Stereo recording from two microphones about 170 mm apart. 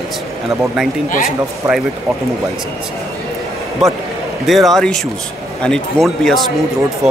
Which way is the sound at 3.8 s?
Centre (ahead or behind).